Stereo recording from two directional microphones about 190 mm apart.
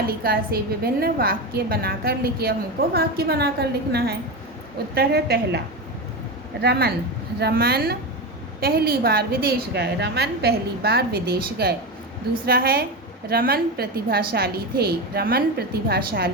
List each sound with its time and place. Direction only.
0.1 s a woman's voice: 50° right (ahead or behind)